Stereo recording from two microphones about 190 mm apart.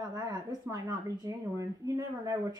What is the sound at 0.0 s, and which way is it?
A woman's voice, 20° right (ahead or behind).